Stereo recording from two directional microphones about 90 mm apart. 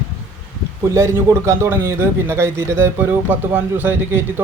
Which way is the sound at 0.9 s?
35° right (ahead or behind).